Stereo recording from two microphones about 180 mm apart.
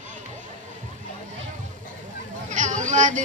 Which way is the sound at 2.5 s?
45° right (ahead or behind).